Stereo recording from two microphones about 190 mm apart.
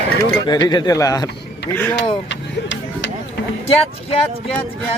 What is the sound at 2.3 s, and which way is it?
Vehicle, 70° left (ahead or behind).